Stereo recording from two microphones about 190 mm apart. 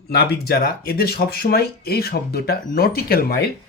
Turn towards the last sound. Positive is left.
turn(degrees=50)  # may be behind; listen again after turning